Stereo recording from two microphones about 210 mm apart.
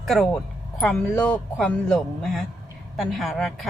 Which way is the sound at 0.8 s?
5° left (ahead or behind).